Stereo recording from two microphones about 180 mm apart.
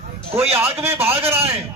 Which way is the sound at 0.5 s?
15° right (ahead or behind).